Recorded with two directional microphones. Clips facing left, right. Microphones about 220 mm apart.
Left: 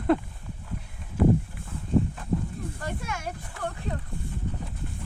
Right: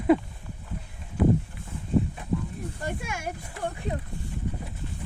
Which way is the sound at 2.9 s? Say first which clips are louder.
Right 2 dB; 10° right (ahead or behind).